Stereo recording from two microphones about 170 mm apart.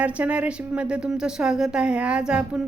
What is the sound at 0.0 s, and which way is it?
A woman's voice, 10° right (ahead or behind).